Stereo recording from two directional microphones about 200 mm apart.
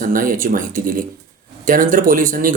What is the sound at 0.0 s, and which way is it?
Speech, 45° right (ahead or behind).